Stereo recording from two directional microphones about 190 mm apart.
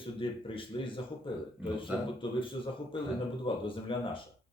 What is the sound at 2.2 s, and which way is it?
Speech, 25° left (ahead or behind).